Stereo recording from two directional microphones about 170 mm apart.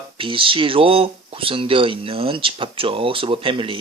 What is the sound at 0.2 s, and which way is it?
Speech, 30° right (ahead or behind).